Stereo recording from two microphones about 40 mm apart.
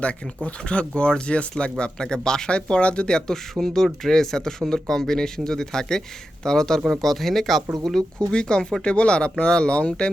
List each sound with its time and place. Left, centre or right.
0.4 s speech: left
1.8 s speech: centre
8.3 s speech: left